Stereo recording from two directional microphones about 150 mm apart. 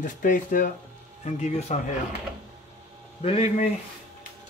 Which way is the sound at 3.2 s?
40° left (ahead or behind).